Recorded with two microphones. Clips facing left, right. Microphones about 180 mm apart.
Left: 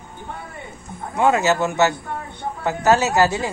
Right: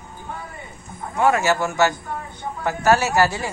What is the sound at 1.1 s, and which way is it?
Speech, 20° left (ahead or behind).